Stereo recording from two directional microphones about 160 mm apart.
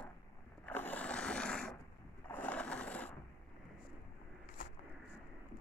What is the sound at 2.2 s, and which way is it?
Sewing machine, 10° left (ahead or behind).